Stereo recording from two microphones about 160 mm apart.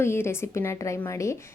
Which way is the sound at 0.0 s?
15° left (ahead or behind).